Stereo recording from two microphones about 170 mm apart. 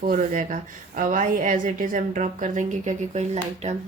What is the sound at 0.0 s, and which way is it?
A woman's voice, 50° right (ahead or behind).